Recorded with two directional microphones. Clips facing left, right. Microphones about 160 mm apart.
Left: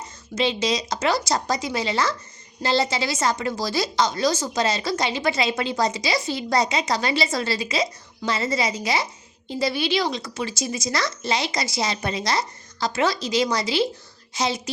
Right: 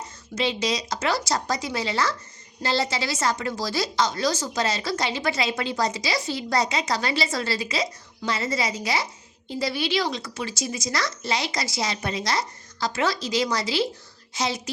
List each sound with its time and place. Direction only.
0.3 s a woman's voice: 25° left (ahead or behind)